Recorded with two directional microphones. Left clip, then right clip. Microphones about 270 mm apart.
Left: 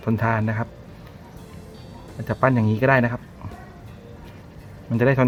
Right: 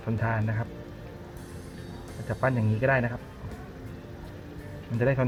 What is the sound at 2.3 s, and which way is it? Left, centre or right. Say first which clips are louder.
Speech: left 8 dB; left.